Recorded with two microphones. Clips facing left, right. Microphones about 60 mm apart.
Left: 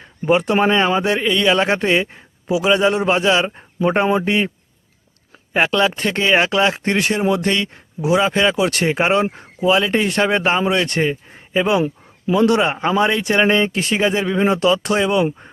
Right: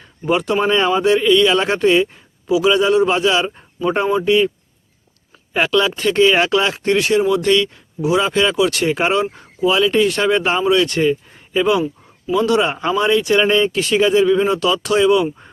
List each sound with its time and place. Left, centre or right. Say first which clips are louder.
0.3 s speech: left 1 dB; left
5.5 s speech: even; left
9.2 s speech: even; left
12.3 s speech: left 1 dB; left